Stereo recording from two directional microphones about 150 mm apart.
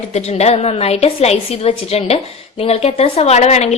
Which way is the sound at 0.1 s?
45° left (ahead or behind).